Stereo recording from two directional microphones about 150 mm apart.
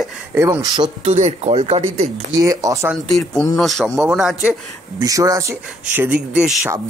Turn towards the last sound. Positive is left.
turn(degrees=-5)  # may be behind; listen again after turning